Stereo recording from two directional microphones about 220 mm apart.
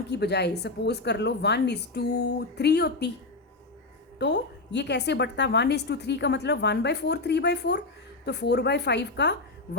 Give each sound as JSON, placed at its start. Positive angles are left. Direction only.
{"t": 0.1, "sound": "a woman's voice", "side_deg": 50}
{"t": 4.2, "sound": "a woman's voice", "side_deg": 50}